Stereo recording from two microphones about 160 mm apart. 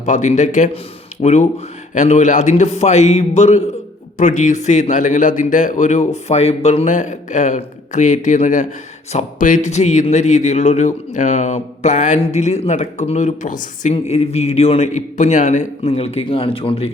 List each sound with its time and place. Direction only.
0.0 s speech: 50° left (ahead or behind)
13.9 s a man's voice: 40° left (ahead or behind)